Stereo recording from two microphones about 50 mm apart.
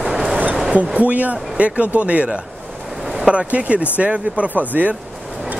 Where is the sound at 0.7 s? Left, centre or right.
Right.